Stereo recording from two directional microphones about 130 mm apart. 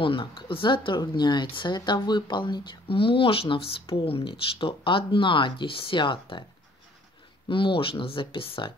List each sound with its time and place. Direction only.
0.0 s speech: 40° left (ahead or behind)
7.4 s speech: 40° left (ahead or behind)